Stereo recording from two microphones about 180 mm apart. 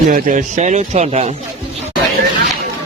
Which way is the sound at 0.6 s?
40° right (ahead or behind).